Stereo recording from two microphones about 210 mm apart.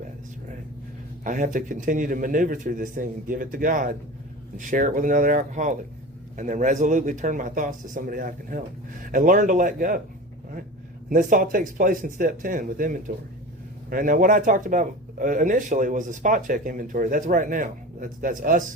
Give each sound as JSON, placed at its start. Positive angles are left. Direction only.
{"t": 1.2, "sound": "speech", "side_deg": -40}
{"t": 11.1, "sound": "speech", "side_deg": -40}